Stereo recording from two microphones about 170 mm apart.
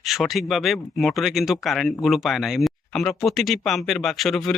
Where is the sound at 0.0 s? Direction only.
Centre (ahead or behind).